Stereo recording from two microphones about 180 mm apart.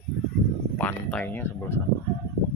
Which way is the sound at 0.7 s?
10° left (ahead or behind).